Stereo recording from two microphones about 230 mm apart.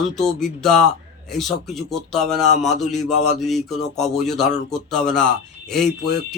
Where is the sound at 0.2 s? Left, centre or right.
Centre.